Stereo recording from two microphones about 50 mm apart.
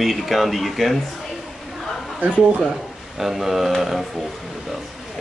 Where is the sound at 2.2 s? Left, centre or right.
Right.